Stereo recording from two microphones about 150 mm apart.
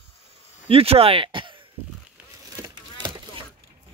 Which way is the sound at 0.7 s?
40° right (ahead or behind).